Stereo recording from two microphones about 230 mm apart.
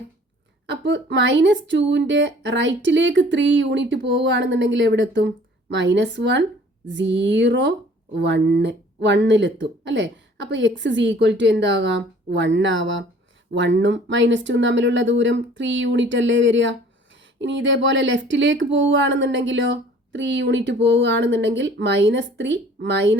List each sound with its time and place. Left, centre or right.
0.7 s speech: right